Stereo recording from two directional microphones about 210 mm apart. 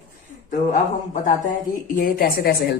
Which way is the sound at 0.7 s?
35° left (ahead or behind).